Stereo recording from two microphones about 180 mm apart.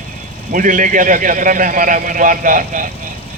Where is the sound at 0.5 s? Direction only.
45° right (ahead or behind).